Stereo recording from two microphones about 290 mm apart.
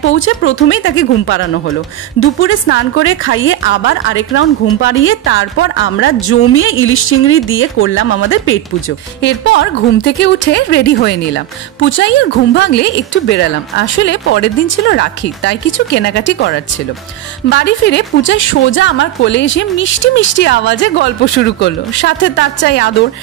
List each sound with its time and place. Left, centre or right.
0.0 s a woman's voice: left